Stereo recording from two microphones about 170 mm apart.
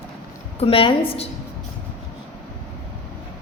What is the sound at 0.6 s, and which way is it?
Speech, 30° left (ahead or behind).